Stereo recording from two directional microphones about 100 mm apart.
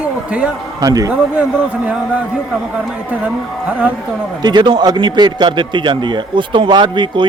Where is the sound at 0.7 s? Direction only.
40° right (ahead or behind).